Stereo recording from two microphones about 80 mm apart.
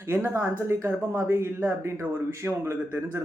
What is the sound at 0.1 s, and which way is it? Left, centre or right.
Speech, right.